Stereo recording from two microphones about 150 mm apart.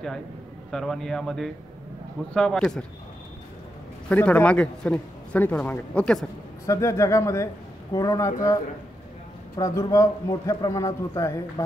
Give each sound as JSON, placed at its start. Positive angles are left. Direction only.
{"t": 0.7, "sound": "a man's voice", "side_deg": 5}
{"t": 4.1, "sound": "speech", "side_deg": 10}
{"t": 6.6, "sound": "a man's voice", "side_deg": 20}
{"t": 9.6, "sound": "a man's voice", "side_deg": 20}